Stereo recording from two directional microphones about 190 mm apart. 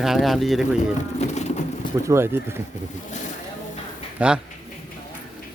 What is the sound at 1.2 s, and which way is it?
Vehicle, 35° left (ahead or behind).